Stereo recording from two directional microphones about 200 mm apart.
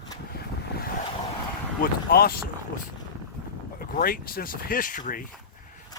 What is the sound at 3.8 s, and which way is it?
Speech, 50° left (ahead or behind).